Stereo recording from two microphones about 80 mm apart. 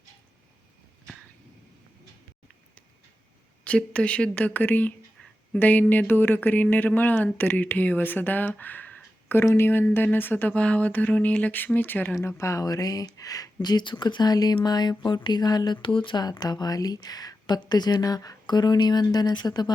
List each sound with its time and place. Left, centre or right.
3.6 s speech: centre
12.4 s speech: left
12.6 s speech: left
16.2 s speech: left